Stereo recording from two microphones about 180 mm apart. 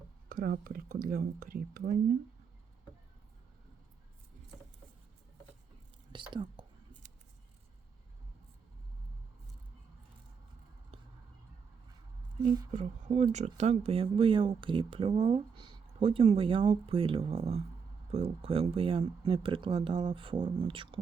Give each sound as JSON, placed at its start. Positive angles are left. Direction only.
{"t": 0.3, "sound": "speech", "side_deg": -50}
{"t": 6.3, "sound": "speech", "side_deg": -25}
{"t": 12.7, "sound": "speech", "side_deg": -40}